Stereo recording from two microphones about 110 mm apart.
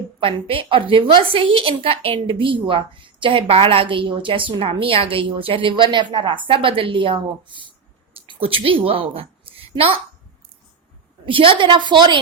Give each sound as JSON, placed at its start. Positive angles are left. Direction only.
{"t": 0.2, "sound": "a woman's voice", "side_deg": -55}
{"t": 8.1, "sound": "a sound", "side_deg": -55}
{"t": 11.3, "sound": "a woman's voice", "side_deg": -50}